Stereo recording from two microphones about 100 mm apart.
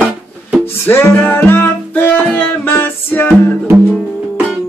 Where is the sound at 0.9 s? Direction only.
20° left (ahead or behind).